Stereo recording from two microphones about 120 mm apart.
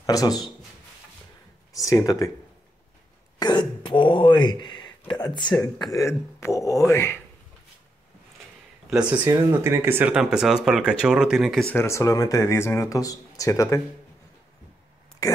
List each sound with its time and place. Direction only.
0.0 s speech: 30° left (ahead or behind)
1.7 s speech: 30° left (ahead or behind)
3.3 s speech: 35° left (ahead or behind)
8.9 s speech: 10° right (ahead or behind)
10.1 s speech: 5° right (ahead or behind)
11.7 s speech: 25° left (ahead or behind)
15.2 s speech: 30° left (ahead or behind)